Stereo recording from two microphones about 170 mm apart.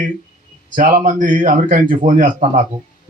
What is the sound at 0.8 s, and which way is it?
Speech, 50° right (ahead or behind).